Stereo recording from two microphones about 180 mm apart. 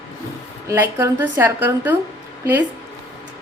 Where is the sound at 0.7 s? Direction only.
15° right (ahead or behind).